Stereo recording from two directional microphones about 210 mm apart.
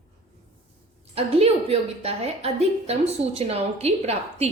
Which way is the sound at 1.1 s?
30° right (ahead or behind).